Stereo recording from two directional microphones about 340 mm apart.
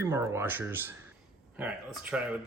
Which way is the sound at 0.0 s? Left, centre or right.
Centre.